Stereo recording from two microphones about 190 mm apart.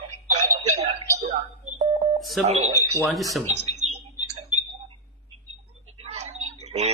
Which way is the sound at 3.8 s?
90° right.